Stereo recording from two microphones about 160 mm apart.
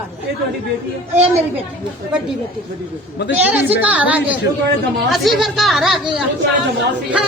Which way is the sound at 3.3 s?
10° right (ahead or behind).